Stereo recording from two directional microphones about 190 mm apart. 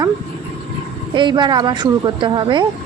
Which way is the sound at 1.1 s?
25° right (ahead or behind).